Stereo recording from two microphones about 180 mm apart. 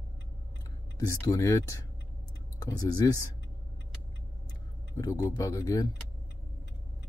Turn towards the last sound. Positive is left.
turn(degrees=20)  # may be behind; listen again after turning